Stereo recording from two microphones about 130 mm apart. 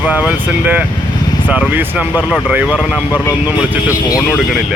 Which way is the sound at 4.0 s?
30° left (ahead or behind).